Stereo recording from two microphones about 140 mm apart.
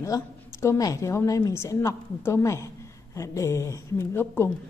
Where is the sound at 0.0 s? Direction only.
20° left (ahead or behind).